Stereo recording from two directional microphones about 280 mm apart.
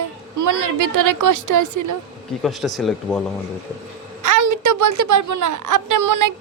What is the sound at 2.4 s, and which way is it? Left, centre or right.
Speech, centre.